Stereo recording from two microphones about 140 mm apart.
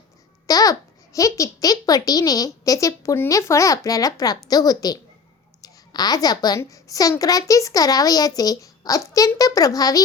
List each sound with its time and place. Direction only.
0.4 s a child's voice: 25° left (ahead or behind)